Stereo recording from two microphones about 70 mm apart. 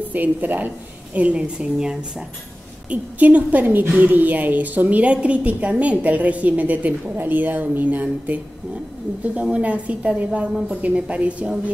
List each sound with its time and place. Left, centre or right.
0.1 s a woman's voice: right
2.9 s a woman's voice: right